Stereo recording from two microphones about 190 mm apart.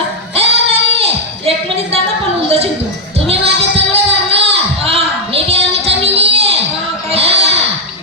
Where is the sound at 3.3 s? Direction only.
30° right (ahead or behind).